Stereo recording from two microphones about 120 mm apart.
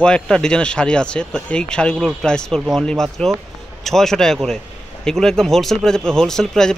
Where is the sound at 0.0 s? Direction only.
5° left (ahead or behind).